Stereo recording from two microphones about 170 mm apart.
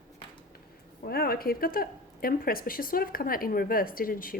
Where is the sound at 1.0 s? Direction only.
65° left (ahead or behind).